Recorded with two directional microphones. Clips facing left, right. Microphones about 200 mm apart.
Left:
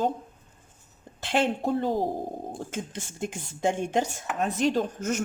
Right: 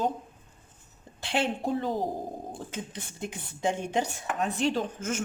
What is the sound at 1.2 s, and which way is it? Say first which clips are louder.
Speech: left 3 dB; 50° left (ahead or behind).